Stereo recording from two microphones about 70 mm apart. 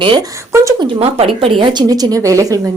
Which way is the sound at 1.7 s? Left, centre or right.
Right.